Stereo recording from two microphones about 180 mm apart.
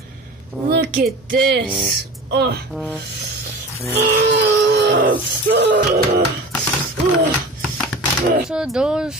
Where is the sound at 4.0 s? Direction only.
65° right (ahead or behind).